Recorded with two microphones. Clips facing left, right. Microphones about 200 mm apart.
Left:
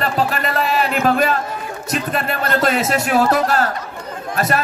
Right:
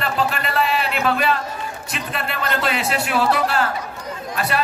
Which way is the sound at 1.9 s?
45° left (ahead or behind).